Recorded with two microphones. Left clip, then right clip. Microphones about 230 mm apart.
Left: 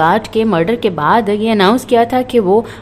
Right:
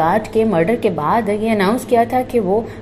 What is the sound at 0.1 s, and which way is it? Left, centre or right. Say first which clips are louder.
A woman's voice: left 2 dB; centre.